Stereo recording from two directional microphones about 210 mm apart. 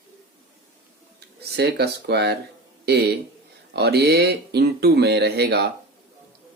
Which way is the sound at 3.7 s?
50° right (ahead or behind).